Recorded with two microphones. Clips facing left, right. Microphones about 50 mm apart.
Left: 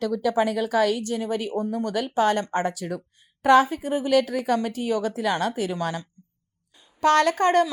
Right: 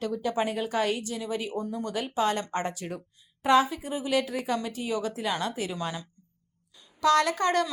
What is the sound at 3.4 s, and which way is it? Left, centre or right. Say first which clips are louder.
Speech: left 5 dB; left.